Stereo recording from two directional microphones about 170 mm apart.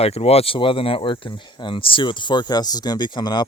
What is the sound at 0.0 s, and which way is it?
Speech, 35° left (ahead or behind).